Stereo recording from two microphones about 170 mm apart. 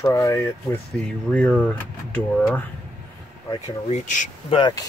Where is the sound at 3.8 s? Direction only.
45° left (ahead or behind).